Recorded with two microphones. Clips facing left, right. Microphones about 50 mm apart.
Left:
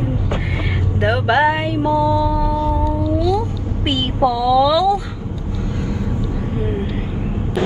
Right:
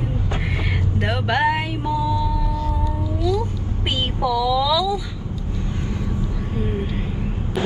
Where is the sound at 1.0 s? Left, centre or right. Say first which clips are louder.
Left 6 dB; left.